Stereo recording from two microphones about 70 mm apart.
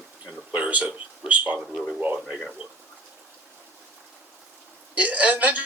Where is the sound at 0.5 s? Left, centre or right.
Centre.